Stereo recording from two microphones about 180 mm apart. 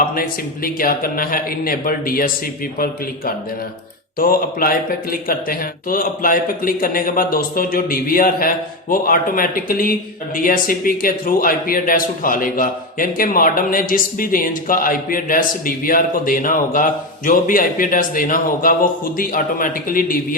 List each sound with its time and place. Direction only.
0.0 s a man's voice: 55° left (ahead or behind)